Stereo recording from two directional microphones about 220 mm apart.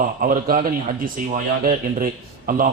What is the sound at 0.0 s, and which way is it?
A man's voice, 40° right (ahead or behind).